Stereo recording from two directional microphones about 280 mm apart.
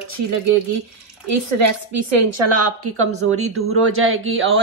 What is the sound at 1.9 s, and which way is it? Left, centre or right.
A woman's voice, right.